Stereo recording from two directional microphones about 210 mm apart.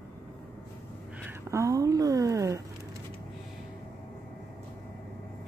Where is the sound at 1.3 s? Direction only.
15° right (ahead or behind).